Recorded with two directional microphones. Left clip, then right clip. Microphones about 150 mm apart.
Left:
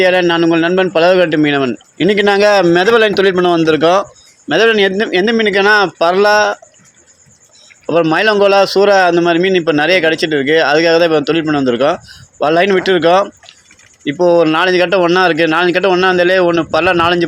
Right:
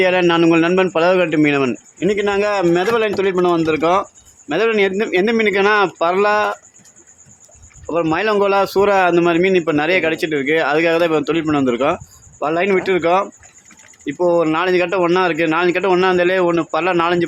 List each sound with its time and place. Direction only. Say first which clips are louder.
0.0 s a man's voice: left 3 dB; 10° left (ahead or behind)
2.0 s a man's voice: left 7 dB; 30° left (ahead or behind)
8.1 s a man's voice: left 5 dB; 20° left (ahead or behind)
12.4 s a man's voice: left 6 dB; 20° left (ahead or behind)